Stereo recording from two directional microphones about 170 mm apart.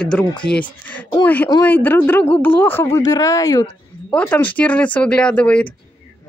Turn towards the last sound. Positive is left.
turn(degrees=5)  # may be behind; listen again after turning